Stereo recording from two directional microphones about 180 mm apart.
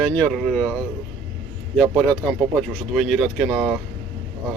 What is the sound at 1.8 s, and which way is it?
Speech, 5° left (ahead or behind).